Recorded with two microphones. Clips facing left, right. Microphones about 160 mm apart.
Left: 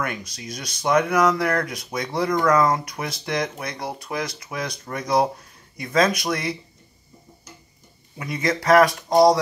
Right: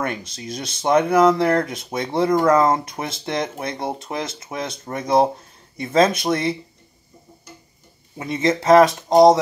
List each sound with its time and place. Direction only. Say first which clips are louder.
0.0 s speech: right 3 dB; 30° right (ahead or behind)
8.2 s speech: right 4 dB; 25° right (ahead or behind)